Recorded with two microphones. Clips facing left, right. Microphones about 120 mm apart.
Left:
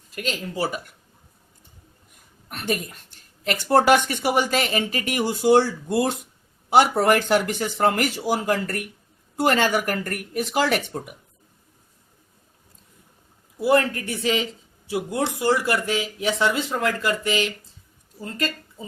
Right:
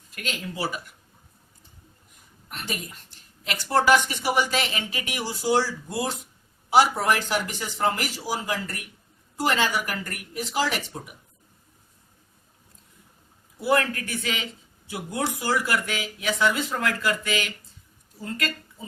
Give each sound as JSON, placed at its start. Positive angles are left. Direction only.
{"t": 0.2, "sound": "speech", "side_deg": 35}
{"t": 3.4, "sound": "speech", "side_deg": 50}
{"t": 13.6, "sound": "speech", "side_deg": 30}